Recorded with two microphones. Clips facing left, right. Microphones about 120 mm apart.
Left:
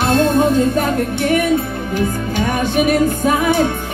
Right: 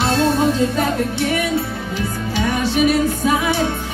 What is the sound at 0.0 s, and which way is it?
Music, 50° left (ahead or behind).